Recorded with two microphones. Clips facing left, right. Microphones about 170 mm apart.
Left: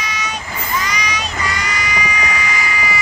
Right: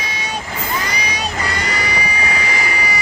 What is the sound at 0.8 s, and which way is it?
Vehicle, 30° right (ahead or behind).